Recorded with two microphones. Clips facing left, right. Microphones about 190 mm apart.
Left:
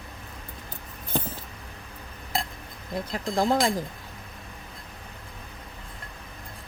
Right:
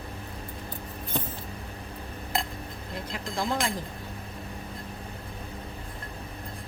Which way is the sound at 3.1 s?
40° left (ahead or behind).